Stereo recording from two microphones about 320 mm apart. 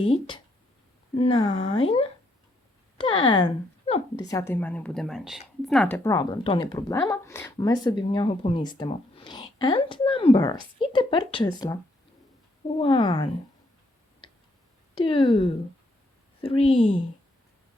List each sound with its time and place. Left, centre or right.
0.1 s a woman's voice: centre
15.0 s a woman's voice: centre